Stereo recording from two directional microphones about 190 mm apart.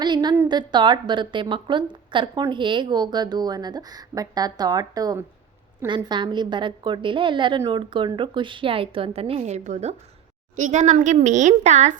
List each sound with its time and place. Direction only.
0.0 s a woman's voice: 20° right (ahead or behind)